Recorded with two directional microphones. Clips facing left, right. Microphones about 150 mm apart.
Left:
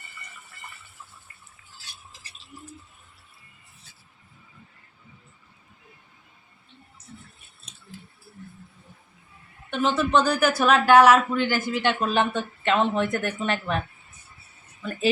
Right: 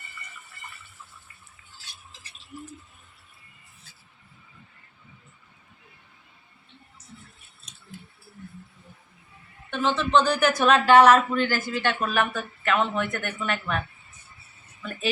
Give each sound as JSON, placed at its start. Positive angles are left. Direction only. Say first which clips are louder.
{"t": 9.6, "sound": "speech", "louder": "left 2 dB", "side_deg": 15}